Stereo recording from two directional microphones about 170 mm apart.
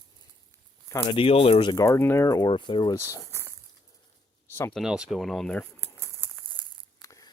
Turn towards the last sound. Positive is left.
turn(degrees=20)  # may be behind; listen again after turning